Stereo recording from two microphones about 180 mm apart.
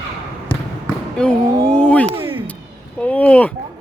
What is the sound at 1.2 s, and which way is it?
Speech, 5° left (ahead or behind).